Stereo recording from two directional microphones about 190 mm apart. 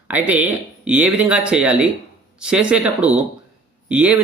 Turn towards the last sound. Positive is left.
turn(degrees=-5)  # may be behind; listen again after turning